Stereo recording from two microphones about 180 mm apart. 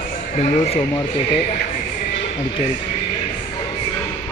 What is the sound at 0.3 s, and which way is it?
Speech, 35° left (ahead or behind).